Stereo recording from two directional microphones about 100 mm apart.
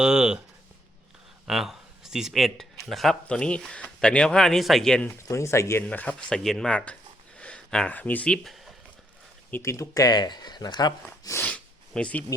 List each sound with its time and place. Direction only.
0.0 s speech: 5° right (ahead or behind)
1.5 s a man's voice: 5° right (ahead or behind)
5.0 s speech: 30° left (ahead or behind)
5.8 s a man's voice: 15° left (ahead or behind)
8.4 s a sound: centre (ahead or behind)
9.5 s speech: 30° left (ahead or behind)
11.4 s a sound: 10° left (ahead or behind)